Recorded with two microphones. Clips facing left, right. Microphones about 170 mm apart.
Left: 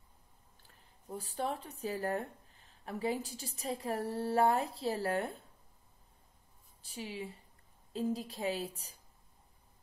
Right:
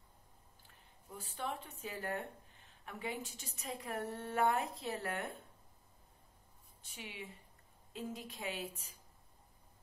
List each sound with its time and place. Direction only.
1.0 s speech: 35° left (ahead or behind)
6.8 s speech: 35° left (ahead or behind)